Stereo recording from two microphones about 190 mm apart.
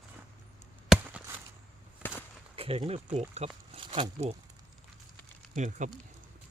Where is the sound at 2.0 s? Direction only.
10° left (ahead or behind).